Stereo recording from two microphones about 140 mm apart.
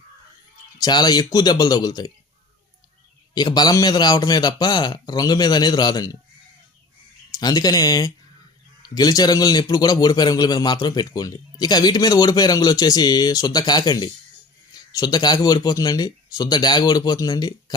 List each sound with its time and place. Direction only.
0.8 s a man's voice: 30° left (ahead or behind)
3.3 s a man's voice: 30° left (ahead or behind)
7.3 s a man's voice: 25° left (ahead or behind)